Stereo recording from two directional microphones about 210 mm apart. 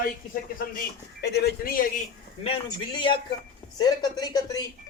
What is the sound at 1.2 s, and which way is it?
Speech, 50° left (ahead or behind).